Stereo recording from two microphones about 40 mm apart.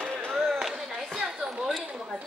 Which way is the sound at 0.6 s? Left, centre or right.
Centre.